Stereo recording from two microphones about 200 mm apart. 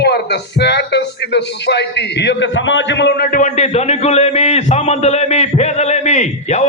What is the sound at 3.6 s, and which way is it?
A man's voice, 30° left (ahead or behind).